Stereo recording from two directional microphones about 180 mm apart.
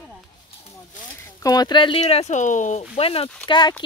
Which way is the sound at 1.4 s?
20° left (ahead or behind).